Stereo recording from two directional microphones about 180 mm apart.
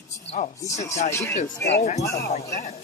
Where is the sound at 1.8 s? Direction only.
40° left (ahead or behind).